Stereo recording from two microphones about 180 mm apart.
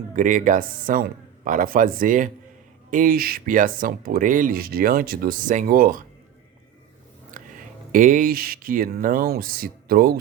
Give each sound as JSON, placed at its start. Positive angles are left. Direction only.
{"t": 0.2, "sound": "speech", "side_deg": -45}
{"t": 7.3, "sound": "a sound", "side_deg": -50}
{"t": 7.9, "sound": "speech", "side_deg": -50}